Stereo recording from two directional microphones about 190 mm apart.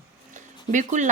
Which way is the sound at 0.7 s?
40° right (ahead or behind).